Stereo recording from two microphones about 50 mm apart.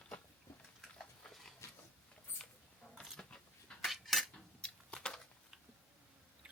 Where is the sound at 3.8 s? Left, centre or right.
Centre.